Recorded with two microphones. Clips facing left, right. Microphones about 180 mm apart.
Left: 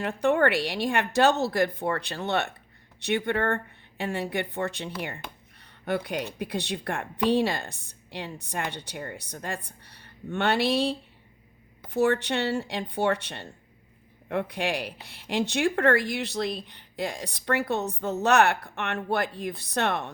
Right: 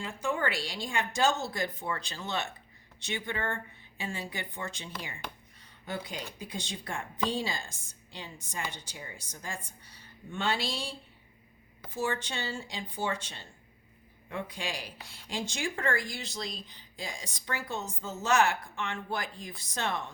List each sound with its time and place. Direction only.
0.0 s speech: 65° left (ahead or behind)